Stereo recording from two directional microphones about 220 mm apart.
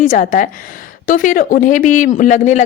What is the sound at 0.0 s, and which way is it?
A woman's voice, 35° left (ahead or behind).